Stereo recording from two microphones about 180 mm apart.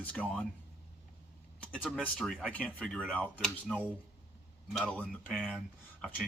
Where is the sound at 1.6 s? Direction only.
5° left (ahead or behind).